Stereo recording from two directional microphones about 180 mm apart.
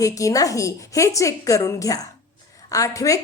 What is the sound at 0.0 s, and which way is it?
A woman's voice, 20° left (ahead or behind).